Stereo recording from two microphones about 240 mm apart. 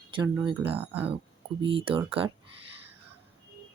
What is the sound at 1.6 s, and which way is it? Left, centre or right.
Speech, right.